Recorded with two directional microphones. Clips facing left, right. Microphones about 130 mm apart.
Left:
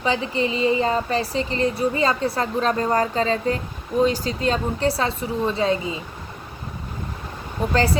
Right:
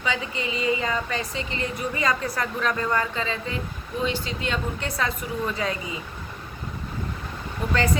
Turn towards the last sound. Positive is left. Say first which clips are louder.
# left 4 dB
turn(degrees=30)  # may be behind; listen again after turning